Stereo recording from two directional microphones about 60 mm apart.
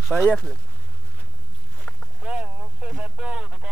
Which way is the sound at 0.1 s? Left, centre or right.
Right.